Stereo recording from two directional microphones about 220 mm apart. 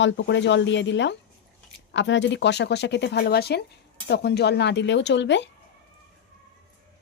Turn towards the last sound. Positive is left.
turn(degrees=55)  # may be behind; listen again after turning